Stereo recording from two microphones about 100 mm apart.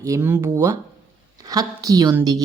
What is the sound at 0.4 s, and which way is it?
Speech, 35° right (ahead or behind).